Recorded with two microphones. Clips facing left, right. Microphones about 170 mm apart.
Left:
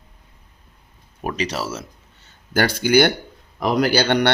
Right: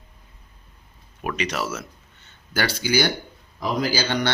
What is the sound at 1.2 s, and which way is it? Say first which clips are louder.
Speech: left 2 dB; 35° left (ahead or behind).